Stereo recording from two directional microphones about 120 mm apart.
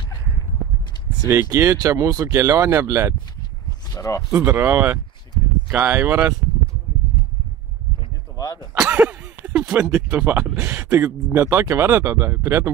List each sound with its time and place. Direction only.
1.3 s speech: 20° right (ahead or behind)
3.9 s speech: 25° left (ahead or behind)
4.3 s speech: 20° right (ahead or behind)
8.9 s speech: 15° right (ahead or behind)